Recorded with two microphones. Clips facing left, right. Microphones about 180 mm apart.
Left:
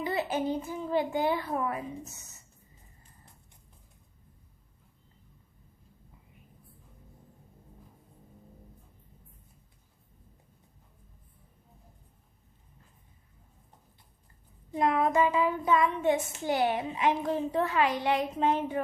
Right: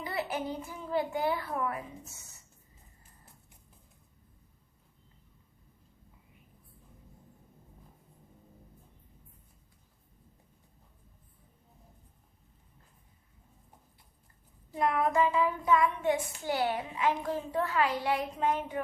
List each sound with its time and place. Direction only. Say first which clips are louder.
0.0 s a child's voice: left 4 dB; 20° left (ahead or behind)
14.7 s child singing: left 2 dB; 20° left (ahead or behind)